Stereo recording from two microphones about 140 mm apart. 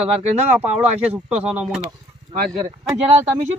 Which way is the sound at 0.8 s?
10° right (ahead or behind).